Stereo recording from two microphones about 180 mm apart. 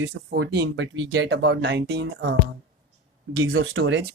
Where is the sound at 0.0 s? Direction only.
75° right (ahead or behind).